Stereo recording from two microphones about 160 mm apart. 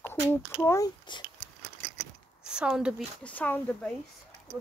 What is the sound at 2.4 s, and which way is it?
Speech, 5° right (ahead or behind).